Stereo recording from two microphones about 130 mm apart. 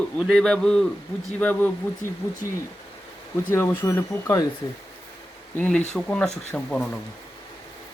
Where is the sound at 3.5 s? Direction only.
20° left (ahead or behind).